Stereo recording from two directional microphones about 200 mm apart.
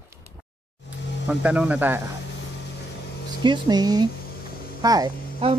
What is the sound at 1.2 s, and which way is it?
Speech, 5° right (ahead or behind).